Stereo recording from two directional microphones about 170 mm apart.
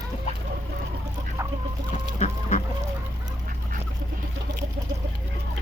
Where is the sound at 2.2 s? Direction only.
45° left (ahead or behind).